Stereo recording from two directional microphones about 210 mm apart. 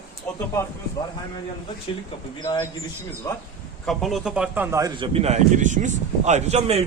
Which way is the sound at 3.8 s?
Centre (ahead or behind).